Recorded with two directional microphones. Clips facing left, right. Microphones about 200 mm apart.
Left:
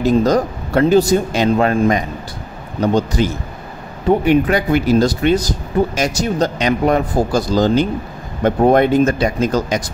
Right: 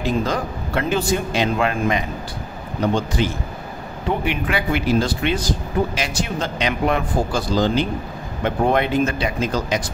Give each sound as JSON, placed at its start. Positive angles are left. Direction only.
{"t": 0.0, "sound": "speech", "side_deg": 40}